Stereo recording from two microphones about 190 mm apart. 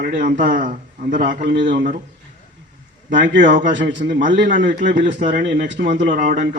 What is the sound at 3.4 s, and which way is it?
A man's voice, 45° right (ahead or behind).